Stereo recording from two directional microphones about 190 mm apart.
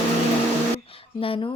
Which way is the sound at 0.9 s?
30° left (ahead or behind).